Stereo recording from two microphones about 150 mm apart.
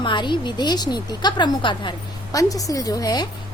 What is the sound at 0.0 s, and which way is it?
A woman's voice, 30° left (ahead or behind).